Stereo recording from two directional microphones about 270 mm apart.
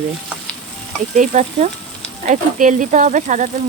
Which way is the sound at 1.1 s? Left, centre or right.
Right.